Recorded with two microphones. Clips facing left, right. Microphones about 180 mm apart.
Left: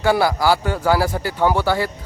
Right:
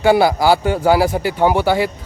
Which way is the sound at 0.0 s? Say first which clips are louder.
Right 4 dB; 20° right (ahead or behind).